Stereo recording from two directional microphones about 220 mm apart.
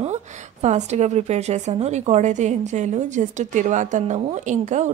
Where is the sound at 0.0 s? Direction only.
30° right (ahead or behind).